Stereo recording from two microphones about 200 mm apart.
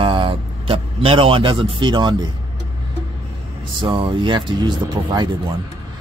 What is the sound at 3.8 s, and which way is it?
Speech, 25° right (ahead or behind).